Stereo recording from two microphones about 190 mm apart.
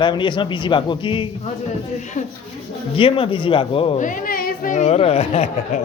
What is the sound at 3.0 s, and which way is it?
Speech, 30° left (ahead or behind).